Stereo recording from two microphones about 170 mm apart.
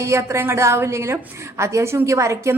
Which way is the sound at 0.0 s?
15° right (ahead or behind).